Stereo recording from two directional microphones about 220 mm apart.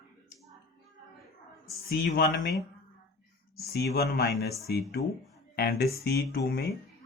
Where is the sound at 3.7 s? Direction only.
45° left (ahead or behind).